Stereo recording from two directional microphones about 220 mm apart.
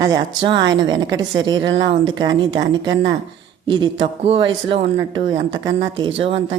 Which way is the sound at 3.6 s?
20° right (ahead or behind).